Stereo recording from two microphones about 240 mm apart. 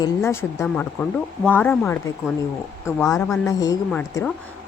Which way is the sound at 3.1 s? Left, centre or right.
Centre.